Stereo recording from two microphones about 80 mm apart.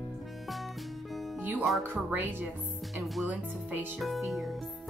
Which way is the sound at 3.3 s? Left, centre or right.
Right.